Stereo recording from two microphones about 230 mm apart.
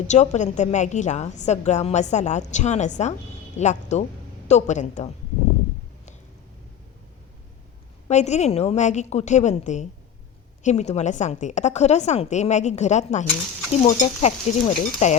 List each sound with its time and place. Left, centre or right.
0.1 s a woman's voice: left
8.0 s a woman's voice: left